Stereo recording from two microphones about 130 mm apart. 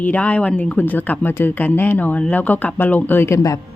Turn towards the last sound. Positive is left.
turn(degrees=25)  # may be behind; listen again after turning